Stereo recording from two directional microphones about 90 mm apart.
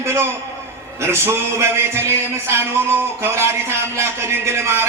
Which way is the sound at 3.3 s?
30° right (ahead or behind).